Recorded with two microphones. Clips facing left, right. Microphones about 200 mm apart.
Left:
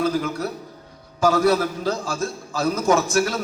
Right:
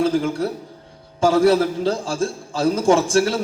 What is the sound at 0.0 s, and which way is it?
A man's voice, 30° right (ahead or behind).